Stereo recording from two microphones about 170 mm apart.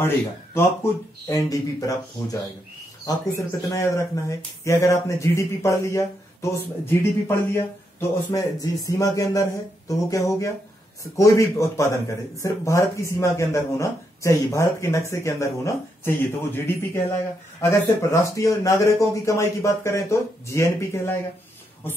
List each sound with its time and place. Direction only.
0.6 s speech: 20° left (ahead or behind)
3.1 s speech: 20° left (ahead or behind)